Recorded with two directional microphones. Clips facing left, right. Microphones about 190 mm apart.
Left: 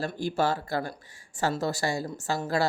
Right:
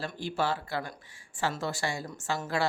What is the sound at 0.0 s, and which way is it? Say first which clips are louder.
A woman's voice: left 4 dB; 45° left (ahead or behind).